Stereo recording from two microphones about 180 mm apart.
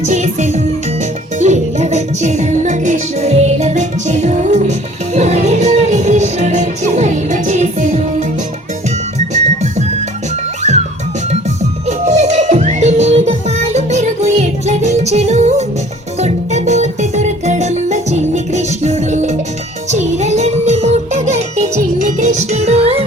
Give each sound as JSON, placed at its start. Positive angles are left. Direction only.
{"t": 0.0, "sound": "music", "side_deg": -40}
{"t": 9.1, "sound": "music", "side_deg": -40}
{"t": 11.9, "sound": "music", "side_deg": -40}